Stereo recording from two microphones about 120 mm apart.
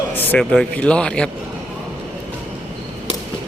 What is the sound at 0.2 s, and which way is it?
Speech, 10° left (ahead or behind).